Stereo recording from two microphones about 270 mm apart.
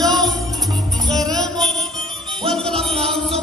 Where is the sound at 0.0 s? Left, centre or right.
Centre.